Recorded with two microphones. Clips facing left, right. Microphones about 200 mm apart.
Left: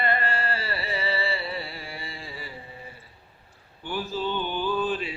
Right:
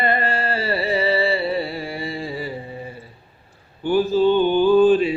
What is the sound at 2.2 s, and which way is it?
Carnatic music, 20° right (ahead or behind).